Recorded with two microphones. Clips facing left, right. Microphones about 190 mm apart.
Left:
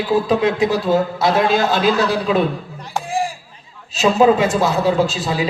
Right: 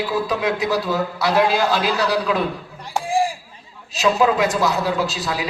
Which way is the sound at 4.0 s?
50° left (ahead or behind).